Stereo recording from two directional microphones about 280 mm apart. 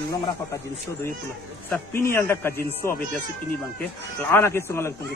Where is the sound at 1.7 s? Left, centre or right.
Centre.